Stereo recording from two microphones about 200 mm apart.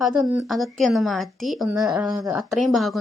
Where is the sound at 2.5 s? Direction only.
Centre (ahead or behind).